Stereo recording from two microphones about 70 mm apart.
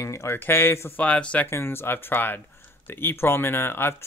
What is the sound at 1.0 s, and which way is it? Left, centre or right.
Speech, centre.